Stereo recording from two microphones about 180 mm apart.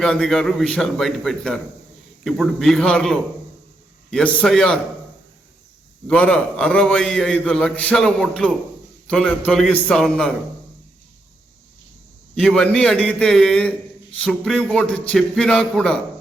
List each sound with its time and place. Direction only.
0.0 s a man's voice: 5° left (ahead or behind)
6.1 s a man's voice: 5° left (ahead or behind)
12.3 s a man's voice: 5° left (ahead or behind)